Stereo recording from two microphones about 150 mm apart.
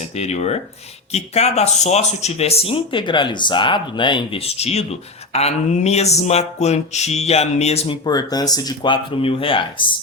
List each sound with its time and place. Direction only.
0.1 s speech: 45° left (ahead or behind)
8.0 s speech: 25° left (ahead or behind)